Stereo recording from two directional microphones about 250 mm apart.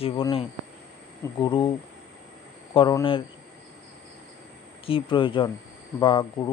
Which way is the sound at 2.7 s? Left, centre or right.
Centre.